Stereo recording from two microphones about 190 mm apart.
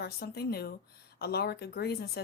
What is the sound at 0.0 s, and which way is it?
A woman's voice, 55° left (ahead or behind).